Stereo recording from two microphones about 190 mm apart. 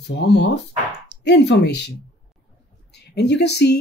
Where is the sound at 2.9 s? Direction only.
60° left (ahead or behind).